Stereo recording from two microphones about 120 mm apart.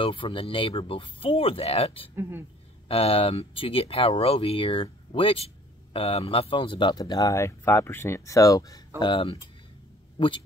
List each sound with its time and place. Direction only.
0.0 s speech: 45° left (ahead or behind)
2.1 s speech: 20° right (ahead or behind)
2.9 s speech: 55° left (ahead or behind); by 8.8 s 30° left (ahead or behind)
9.0 s speech: 45° left (ahead or behind)